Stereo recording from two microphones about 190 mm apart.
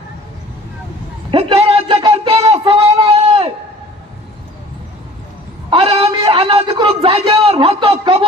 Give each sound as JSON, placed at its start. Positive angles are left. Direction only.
{"t": 1.3, "sound": "speech", "side_deg": -30}
{"t": 5.7, "sound": "a sound", "side_deg": -30}
{"t": 6.2, "sound": "a man's voice", "side_deg": -30}